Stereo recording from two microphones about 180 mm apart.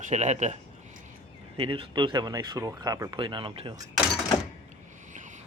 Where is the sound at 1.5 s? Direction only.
30° right (ahead or behind).